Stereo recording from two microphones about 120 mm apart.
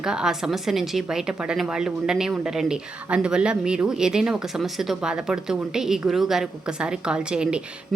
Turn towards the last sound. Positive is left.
turn(degrees=-10)  # may be behind; listen again after turning